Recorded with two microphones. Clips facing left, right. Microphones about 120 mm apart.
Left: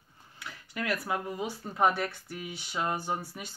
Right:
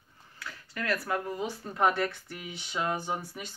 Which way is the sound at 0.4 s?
20° left (ahead or behind).